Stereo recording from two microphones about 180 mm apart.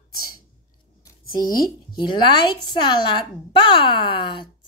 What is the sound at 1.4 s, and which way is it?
Speech, 20° left (ahead or behind).